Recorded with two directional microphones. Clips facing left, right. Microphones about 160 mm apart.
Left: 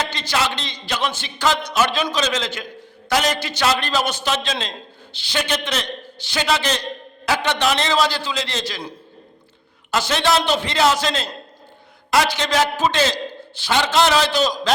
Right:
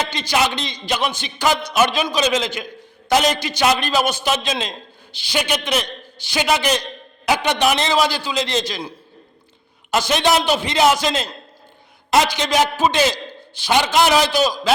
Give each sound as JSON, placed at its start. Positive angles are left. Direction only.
{"t": 0.0, "sound": "speech", "side_deg": -15}
{"t": 9.9, "sound": "speech", "side_deg": -15}